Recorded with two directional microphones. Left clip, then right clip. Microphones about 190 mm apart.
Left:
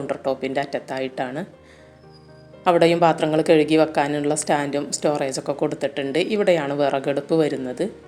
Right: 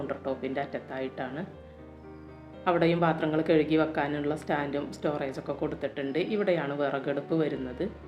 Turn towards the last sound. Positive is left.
turn(degrees=40)  # may be behind; listen again after turning